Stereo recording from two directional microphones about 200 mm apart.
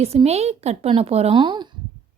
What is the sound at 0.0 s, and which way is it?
A woman's voice, 30° right (ahead or behind).